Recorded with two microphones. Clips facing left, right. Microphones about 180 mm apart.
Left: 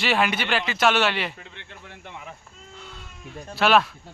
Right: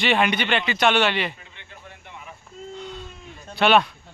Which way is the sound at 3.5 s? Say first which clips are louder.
Right 1 dB; centre (ahead or behind).